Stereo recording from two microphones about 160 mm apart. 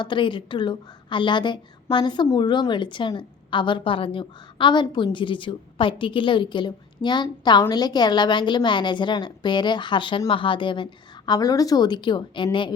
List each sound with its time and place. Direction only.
0.0 s a woman's voice: 30° left (ahead or behind)